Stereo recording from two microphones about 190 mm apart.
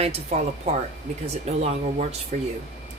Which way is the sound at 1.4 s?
35° right (ahead or behind).